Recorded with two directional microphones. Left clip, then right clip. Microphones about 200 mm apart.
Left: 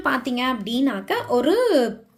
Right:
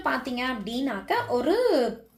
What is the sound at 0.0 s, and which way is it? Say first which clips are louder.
A woman's voice: left 5 dB; 50° left (ahead or behind).